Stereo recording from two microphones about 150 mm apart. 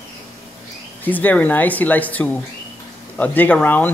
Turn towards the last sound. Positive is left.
turn(degrees=10)  # may be behind; listen again after turning